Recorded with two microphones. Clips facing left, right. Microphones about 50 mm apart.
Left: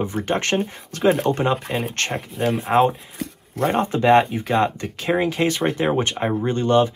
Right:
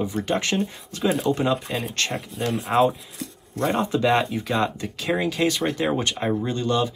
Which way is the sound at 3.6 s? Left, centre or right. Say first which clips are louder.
Left 3 dB; left.